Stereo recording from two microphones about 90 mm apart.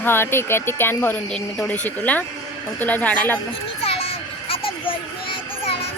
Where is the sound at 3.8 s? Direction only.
90° left.